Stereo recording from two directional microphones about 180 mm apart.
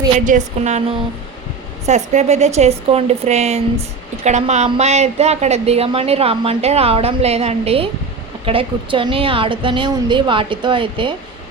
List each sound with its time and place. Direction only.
0.3 s a woman's voice: 40° right (ahead or behind)